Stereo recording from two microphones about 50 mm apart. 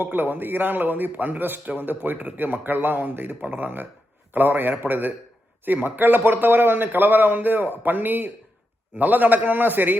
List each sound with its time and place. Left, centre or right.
0.0 s a man's voice: right